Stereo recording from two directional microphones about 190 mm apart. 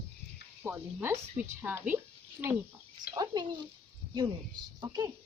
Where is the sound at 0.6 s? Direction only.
10° right (ahead or behind).